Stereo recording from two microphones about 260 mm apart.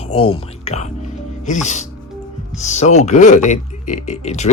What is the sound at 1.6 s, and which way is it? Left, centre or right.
Speech, left.